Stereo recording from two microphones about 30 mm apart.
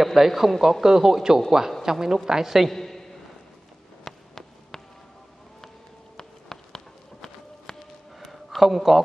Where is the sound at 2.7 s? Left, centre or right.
Centre.